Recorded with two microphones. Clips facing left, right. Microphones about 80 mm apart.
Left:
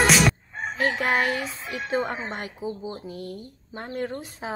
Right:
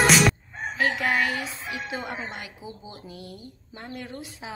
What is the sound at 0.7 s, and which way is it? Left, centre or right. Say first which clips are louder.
Speech: left 1 dB; left.